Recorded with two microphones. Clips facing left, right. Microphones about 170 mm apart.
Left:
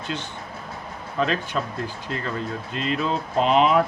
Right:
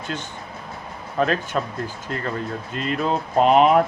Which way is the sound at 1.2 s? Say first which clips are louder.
Right 2 dB; 50° right (ahead or behind).